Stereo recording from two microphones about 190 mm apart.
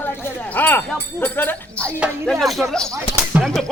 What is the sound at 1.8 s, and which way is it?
Speech, 10° right (ahead or behind).